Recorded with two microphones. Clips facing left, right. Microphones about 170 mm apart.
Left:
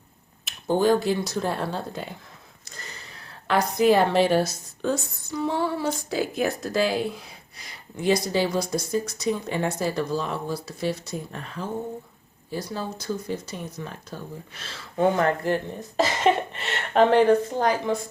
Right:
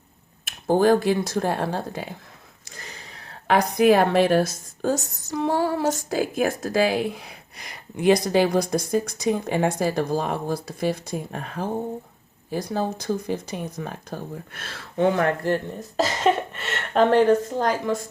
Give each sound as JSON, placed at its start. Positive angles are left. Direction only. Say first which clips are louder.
{"t": 0.4, "sound": "a woman's voice", "louder": "right 3 dB", "side_deg": -50}
{"t": 3.4, "sound": "a woman's voice", "louder": "right 2 dB", "side_deg": -55}
{"t": 15.3, "sound": "speech", "louder": "right 1 dB", "side_deg": 15}
{"t": 16.0, "sound": "a woman's voice", "louder": "right 1 dB", "side_deg": -45}
{"t": 17.0, "sound": "speech", "louder": "even", "side_deg": 15}